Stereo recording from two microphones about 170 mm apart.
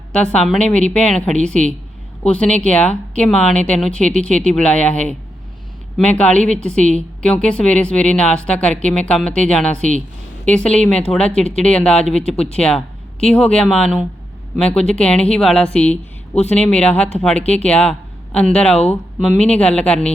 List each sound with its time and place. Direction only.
0.1 s speech: 5° left (ahead or behind)
9.7 s a woman's voice: 45° right (ahead or behind)
10.4 s speech: 5° left (ahead or behind)